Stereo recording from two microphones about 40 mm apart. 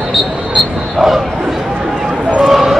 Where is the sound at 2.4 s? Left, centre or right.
Centre.